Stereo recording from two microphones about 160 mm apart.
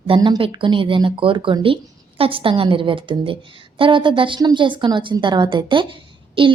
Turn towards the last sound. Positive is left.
turn(degrees=-30)  # may be behind; listen again after turning